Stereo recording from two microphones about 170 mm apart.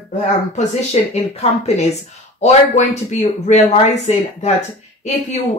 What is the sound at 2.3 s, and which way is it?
Speech, 40° left (ahead or behind).